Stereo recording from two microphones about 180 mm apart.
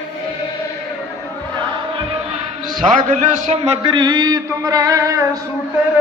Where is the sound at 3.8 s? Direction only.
25° right (ahead or behind).